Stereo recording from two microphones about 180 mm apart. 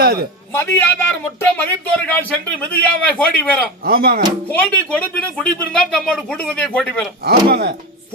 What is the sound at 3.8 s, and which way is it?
Speech, 55° right (ahead or behind).